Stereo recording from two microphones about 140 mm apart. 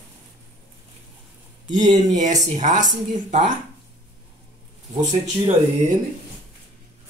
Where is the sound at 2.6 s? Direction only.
60° right (ahead or behind).